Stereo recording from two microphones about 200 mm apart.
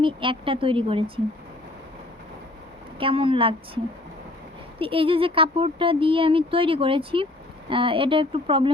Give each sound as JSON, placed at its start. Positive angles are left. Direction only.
{"t": 0.0, "sound": "speech", "side_deg": -25}
{"t": 3.0, "sound": "speech", "side_deg": -25}
{"t": 4.8, "sound": "speech", "side_deg": -25}